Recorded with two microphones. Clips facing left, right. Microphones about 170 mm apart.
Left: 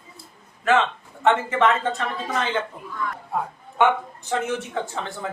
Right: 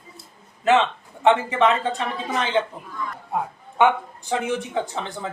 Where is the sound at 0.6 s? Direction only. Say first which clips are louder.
Right 2 dB; 20° right (ahead or behind).